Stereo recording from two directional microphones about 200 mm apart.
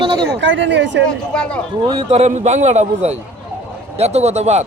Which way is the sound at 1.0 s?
5° left (ahead or behind).